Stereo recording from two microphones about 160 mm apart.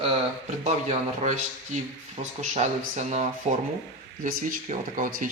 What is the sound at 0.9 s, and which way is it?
Speech, 45° right (ahead or behind).